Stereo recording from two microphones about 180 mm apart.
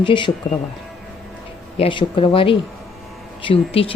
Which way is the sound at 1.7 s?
30° left (ahead or behind).